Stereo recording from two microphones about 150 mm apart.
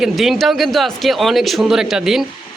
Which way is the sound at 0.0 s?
Centre (ahead or behind).